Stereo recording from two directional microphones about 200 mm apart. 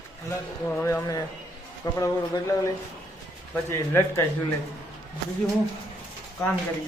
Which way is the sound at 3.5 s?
10° left (ahead or behind).